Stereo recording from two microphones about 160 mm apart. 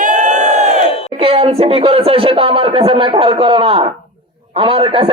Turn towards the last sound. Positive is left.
turn(degrees=-30)  # may be behind; listen again after turning